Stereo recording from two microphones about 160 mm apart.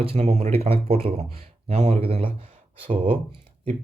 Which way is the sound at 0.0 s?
40° right (ahead or behind).